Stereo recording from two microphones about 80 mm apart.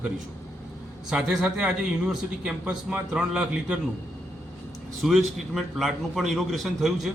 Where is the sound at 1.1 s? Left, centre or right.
Centre.